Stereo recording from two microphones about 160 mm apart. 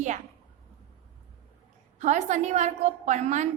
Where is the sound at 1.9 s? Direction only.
45° right (ahead or behind).